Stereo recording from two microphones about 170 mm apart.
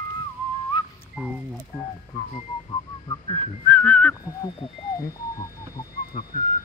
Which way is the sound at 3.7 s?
10° left (ahead or behind).